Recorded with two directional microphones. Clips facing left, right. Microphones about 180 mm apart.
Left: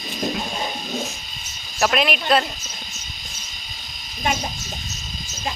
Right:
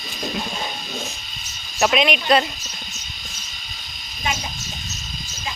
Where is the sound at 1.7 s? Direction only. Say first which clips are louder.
Right 2 dB; centre (ahead or behind).